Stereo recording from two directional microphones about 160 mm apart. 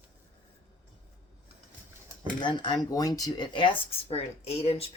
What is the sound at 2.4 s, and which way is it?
Speech, 30° left (ahead or behind).